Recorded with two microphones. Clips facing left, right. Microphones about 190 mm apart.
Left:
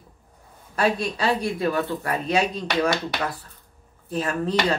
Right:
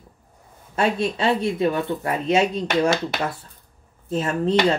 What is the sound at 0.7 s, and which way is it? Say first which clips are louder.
Speech: right 2 dB; 25° right (ahead or behind).